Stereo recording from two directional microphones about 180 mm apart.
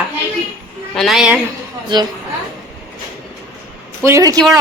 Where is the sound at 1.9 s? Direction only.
25° right (ahead or behind).